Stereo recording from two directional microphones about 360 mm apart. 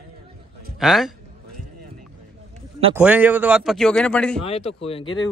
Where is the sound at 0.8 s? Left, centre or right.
Centre.